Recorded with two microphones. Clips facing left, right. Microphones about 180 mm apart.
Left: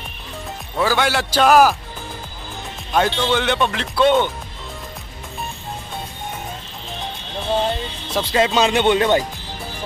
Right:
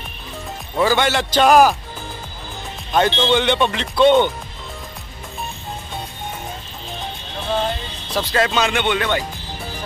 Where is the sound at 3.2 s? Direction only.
Centre (ahead or behind).